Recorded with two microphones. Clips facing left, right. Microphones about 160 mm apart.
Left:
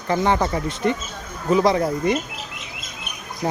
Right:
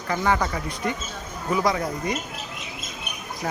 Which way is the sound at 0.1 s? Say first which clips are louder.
Left 4 dB; 30° left (ahead or behind).